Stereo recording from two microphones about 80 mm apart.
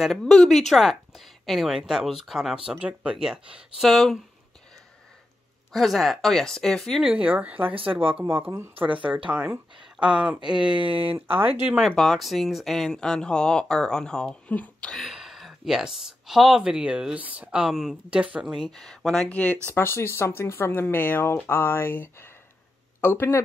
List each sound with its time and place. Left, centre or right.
0.0 s speech: centre
5.7 s speech: centre
7.0 s speech: centre
12.0 s speech: centre
15.0 s speech: centre
18.1 s speech: centre
18.8 s speech: centre
19.7 s speech: left